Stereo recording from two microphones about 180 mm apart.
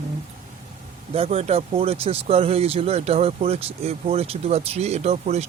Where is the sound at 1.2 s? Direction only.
35° right (ahead or behind).